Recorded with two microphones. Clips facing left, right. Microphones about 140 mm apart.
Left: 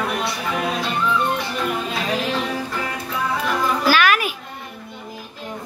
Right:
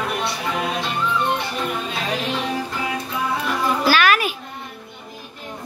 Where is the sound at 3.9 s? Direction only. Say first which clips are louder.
Even; 15° left (ahead or behind).